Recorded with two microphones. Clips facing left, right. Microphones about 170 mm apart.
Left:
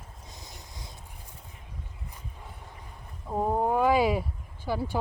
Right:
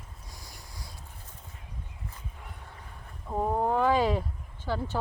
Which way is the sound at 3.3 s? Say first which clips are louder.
Left 1 dB; 10° left (ahead or behind).